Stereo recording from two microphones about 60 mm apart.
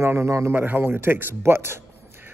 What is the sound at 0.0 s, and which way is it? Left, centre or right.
Speech, right.